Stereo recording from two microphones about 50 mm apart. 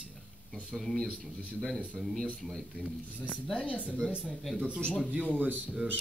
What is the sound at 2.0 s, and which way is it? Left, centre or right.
Speech, centre.